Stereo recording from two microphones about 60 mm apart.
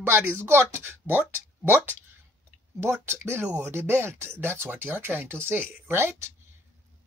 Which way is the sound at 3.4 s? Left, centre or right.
Right.